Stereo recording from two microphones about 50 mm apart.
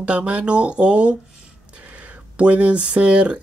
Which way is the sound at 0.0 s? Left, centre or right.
Right.